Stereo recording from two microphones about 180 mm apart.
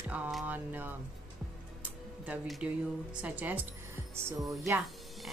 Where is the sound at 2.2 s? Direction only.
5° right (ahead or behind).